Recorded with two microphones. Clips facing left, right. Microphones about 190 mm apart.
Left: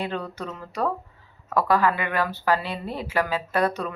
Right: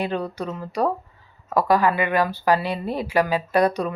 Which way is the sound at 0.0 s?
15° right (ahead or behind).